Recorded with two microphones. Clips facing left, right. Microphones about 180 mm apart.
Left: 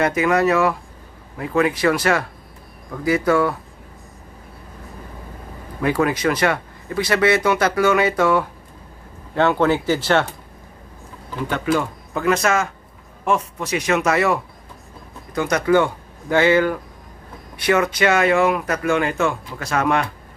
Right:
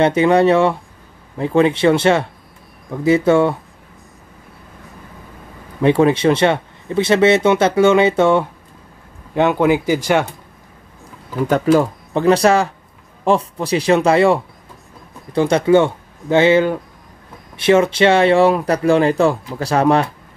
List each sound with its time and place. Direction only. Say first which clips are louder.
0.0 s speech: right 5 dB; 30° right (ahead or behind)
5.8 s speech: right 6 dB; 25° right (ahead or behind)
11.4 s speech: right 7 dB; 40° right (ahead or behind)